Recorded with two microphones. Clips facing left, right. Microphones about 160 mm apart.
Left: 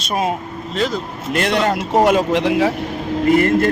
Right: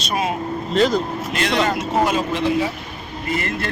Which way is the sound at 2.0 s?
75° left (ahead or behind).